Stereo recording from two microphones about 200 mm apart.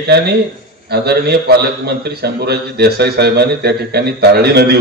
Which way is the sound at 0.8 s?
55° right (ahead or behind).